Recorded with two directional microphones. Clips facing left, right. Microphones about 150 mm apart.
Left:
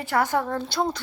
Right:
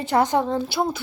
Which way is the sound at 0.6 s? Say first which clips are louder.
Right 2 dB; 5° right (ahead or behind).